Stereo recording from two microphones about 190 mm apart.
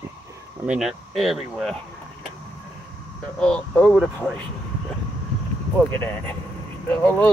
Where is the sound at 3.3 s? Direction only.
5° left (ahead or behind).